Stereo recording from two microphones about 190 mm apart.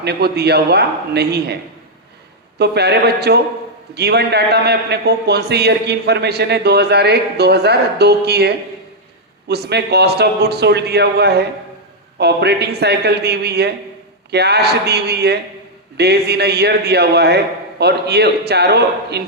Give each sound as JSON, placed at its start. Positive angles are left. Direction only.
{"t": 0.0, "sound": "a man's voice", "side_deg": -60}
{"t": 2.6, "sound": "a man's voice", "side_deg": -60}